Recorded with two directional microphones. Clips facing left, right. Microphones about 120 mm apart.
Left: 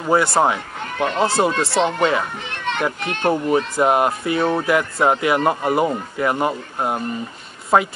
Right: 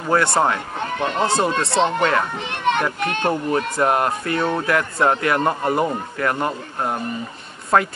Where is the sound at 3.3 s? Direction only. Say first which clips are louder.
Left 5 dB; 15° left (ahead or behind).